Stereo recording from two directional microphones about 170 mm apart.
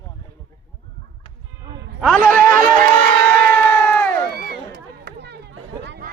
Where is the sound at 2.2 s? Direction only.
55° right (ahead or behind).